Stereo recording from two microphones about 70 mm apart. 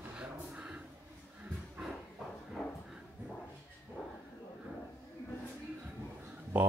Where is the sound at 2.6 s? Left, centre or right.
Centre.